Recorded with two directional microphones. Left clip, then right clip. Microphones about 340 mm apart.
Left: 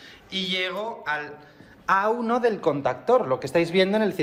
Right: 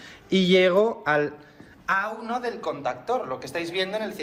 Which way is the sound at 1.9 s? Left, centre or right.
Centre.